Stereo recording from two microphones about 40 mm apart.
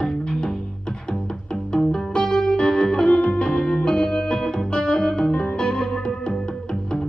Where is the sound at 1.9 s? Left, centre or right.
Centre.